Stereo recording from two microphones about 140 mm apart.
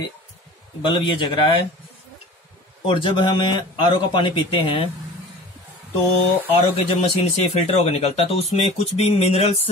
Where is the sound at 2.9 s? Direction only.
35° left (ahead or behind).